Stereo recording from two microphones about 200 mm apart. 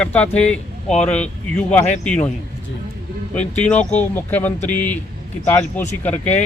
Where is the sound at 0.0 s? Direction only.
5° left (ahead or behind).